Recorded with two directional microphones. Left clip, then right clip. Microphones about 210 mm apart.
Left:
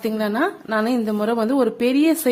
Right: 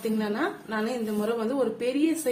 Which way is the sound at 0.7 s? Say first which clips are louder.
Left 8 dB; 55° left (ahead or behind).